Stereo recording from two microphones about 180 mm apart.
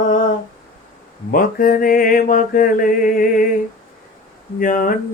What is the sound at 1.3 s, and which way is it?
Mantra, 50° left (ahead or behind).